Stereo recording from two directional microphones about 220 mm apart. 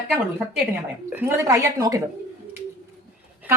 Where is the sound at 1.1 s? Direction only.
10° right (ahead or behind).